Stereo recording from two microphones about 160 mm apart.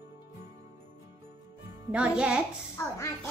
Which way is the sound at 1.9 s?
5° right (ahead or behind).